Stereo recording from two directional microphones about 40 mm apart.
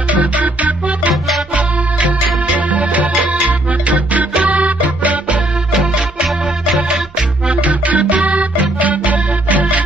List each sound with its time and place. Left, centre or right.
0.1 s music: right
1.1 s music: centre
1.5 s music: right
7.4 s music: right